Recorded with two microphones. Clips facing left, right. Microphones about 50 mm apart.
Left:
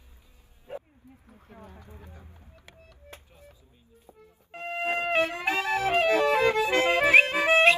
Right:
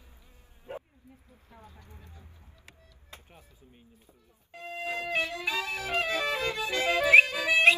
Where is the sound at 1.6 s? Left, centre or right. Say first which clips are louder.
Left 5 dB; left.